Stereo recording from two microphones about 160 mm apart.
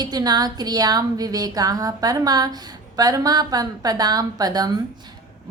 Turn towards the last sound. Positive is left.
turn(degrees=-25)  # may be behind; listen again after turning